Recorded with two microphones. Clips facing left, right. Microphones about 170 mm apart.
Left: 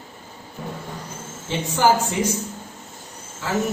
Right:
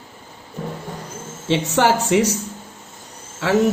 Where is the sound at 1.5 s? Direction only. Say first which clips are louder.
Right 2 dB; 75° right (ahead or behind).